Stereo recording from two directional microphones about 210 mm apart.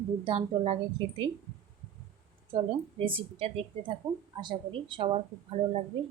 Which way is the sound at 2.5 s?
25° right (ahead or behind).